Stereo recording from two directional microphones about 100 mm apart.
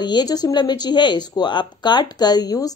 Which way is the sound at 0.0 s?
45° left (ahead or behind).